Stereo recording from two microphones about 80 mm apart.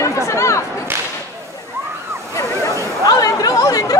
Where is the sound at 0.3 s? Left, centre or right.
Left.